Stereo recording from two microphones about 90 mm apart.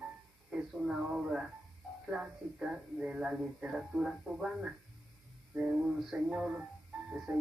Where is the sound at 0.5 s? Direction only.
10° right (ahead or behind).